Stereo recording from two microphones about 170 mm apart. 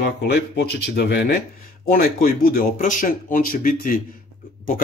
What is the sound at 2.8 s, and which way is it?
A man's voice, 55° left (ahead or behind).